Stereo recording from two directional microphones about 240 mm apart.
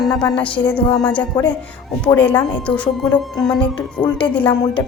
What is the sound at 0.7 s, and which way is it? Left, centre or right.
Speech, centre.